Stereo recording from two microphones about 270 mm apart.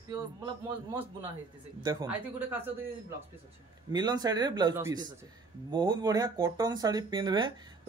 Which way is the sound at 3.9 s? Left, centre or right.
Centre.